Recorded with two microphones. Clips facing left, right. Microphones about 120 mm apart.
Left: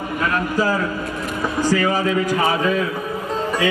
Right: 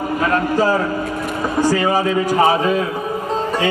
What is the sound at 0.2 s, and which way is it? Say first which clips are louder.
Speech: right 3 dB; 30° right (ahead or behind).